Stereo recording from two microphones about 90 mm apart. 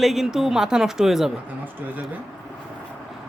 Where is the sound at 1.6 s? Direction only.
20° right (ahead or behind).